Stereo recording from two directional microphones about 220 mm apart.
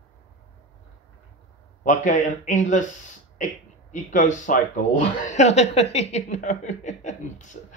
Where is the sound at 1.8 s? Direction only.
35° left (ahead or behind).